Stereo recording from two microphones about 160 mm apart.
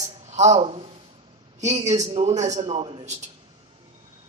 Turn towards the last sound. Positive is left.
turn(degrees=-40)  # may be behind; listen again after turning